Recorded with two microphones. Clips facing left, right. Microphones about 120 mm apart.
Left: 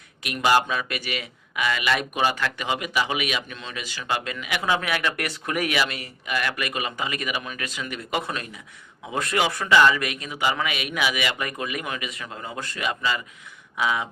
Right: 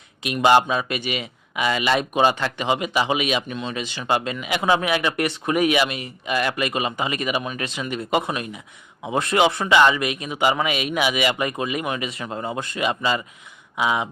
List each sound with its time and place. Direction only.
0.2 s speech: 25° right (ahead or behind)